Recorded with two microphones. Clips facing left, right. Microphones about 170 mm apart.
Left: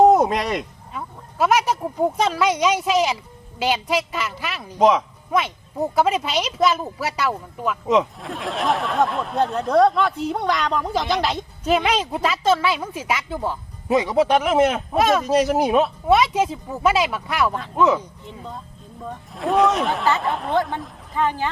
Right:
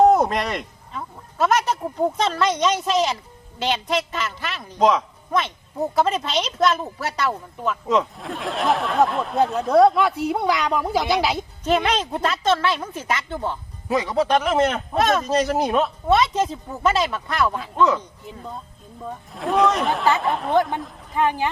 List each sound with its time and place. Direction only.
0.3 s speech: 5° left (ahead or behind)
11.6 s speech: 5° left (ahead or behind)
13.8 s speech: 20° left (ahead or behind)
14.1 s speech: 5° left (ahead or behind)
19.0 s speech: centre (ahead or behind)
20.5 s speech: 15° right (ahead or behind)